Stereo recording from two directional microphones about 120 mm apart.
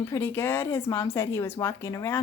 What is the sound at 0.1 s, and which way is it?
Speech, 20° left (ahead or behind).